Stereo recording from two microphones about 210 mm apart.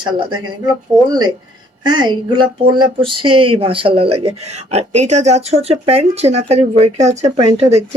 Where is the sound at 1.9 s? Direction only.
20° right (ahead or behind).